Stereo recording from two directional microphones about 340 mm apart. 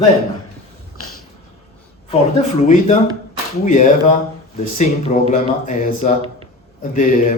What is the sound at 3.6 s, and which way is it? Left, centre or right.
Speech, left.